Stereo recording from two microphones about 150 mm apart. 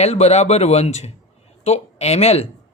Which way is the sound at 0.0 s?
45° left (ahead or behind).